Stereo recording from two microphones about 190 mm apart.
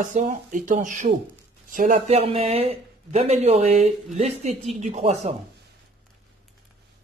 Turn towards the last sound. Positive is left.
turn(degrees=-35)  # may be behind; listen again after turning